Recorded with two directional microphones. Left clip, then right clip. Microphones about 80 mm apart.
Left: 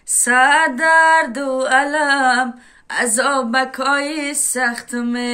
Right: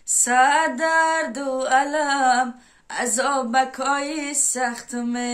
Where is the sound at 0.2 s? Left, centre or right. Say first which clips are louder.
Left 4 dB; right.